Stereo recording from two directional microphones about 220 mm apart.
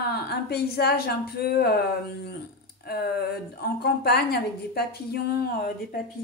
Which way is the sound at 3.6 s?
45° left (ahead or behind).